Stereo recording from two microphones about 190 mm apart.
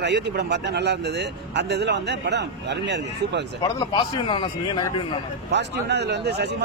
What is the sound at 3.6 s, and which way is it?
A man's voice, 20° left (ahead or behind).